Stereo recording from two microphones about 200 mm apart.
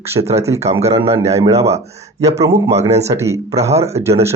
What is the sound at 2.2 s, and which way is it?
Speech, 15° right (ahead or behind).